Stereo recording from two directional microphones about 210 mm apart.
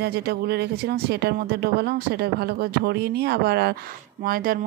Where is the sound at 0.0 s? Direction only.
50° right (ahead or behind).